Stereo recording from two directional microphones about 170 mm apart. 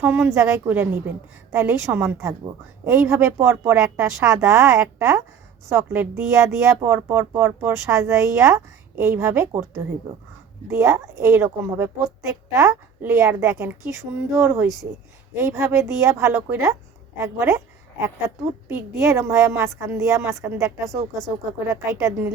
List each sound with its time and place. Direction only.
0.0 s speech: 15° right (ahead or behind)
10.7 s speech: 15° right (ahead or behind)
18.7 s speech: 15° right (ahead or behind)